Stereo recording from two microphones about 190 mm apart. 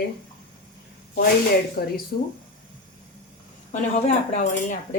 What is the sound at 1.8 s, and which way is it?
Speech, 50° left (ahead or behind).